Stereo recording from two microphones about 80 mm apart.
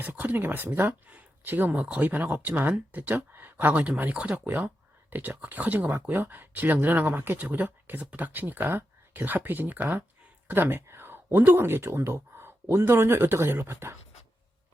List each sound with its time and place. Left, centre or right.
0.0 s speech: right